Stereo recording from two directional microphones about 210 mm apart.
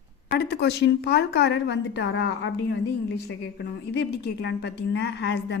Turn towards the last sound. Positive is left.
turn(degrees=55)  # may be behind; listen again after turning